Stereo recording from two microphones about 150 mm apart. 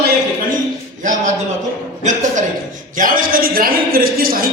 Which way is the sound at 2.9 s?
65° right (ahead or behind).